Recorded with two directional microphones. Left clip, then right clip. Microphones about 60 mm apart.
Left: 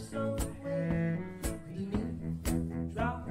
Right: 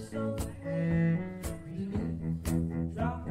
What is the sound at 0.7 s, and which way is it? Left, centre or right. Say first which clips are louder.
Music: right 2 dB; right.